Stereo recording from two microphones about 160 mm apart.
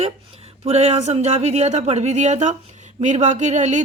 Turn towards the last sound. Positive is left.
turn(degrees=-45)  # may be behind; listen again after turning